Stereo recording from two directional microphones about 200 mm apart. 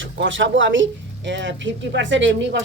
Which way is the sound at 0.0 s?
70° right (ahead or behind).